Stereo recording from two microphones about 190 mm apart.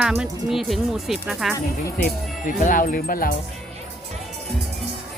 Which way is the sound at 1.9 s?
45° left (ahead or behind).